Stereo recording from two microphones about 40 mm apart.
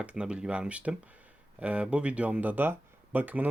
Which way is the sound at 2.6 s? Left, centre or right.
Right.